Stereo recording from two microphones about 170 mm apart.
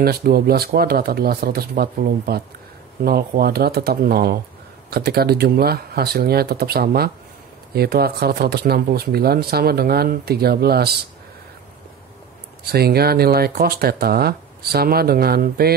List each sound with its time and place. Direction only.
0.0 s speech: 65° right (ahead or behind)
12.7 s speech: 65° right (ahead or behind)